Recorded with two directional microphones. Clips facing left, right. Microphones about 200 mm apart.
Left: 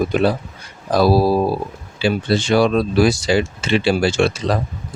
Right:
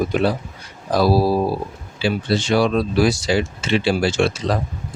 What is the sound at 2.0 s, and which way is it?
Speech, 55° left (ahead or behind).